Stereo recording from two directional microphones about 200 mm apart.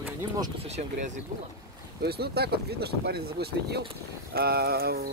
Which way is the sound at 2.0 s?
50° right (ahead or behind).